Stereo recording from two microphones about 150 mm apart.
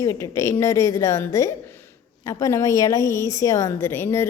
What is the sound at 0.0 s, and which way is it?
A woman's voice, 20° left (ahead or behind).